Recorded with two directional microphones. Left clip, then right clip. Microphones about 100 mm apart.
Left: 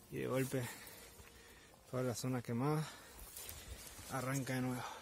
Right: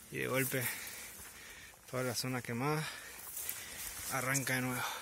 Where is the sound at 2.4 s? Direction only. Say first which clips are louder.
Right 3 dB; 45° left (ahead or behind).